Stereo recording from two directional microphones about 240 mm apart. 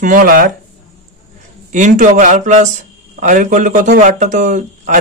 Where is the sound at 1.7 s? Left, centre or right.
Right.